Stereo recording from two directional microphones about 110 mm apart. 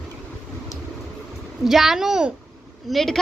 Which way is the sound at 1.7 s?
5° right (ahead or behind).